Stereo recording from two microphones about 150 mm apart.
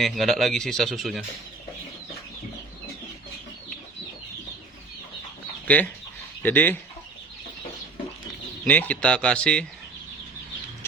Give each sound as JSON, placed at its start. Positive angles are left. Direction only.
{"t": 0.0, "sound": "speech", "side_deg": 0}
{"t": 5.6, "sound": "speech", "side_deg": 10}
{"t": 8.6, "sound": "speech", "side_deg": 10}